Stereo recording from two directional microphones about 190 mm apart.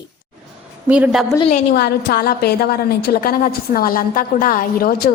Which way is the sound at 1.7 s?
60° left (ahead or behind).